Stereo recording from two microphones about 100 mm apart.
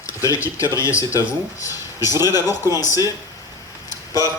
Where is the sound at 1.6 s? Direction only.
35° left (ahead or behind).